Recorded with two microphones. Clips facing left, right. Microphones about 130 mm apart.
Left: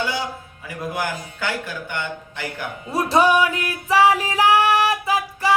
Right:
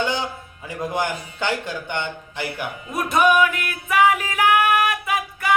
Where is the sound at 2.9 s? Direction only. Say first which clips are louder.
Left 1 dB; 30° left (ahead or behind).